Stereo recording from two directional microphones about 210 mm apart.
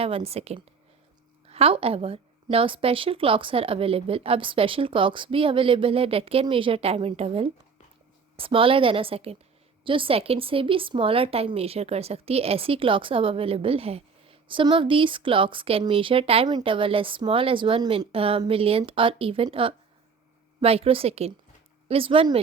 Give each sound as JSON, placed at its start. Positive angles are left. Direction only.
{"t": 0.0, "sound": "speech", "side_deg": -30}